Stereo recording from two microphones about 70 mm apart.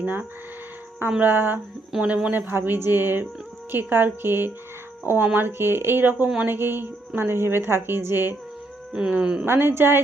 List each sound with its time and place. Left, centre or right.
0.0 s speech: right
1.9 s speech: centre
2.3 s speech: right
8.9 s speech: centre
9.5 s speech: right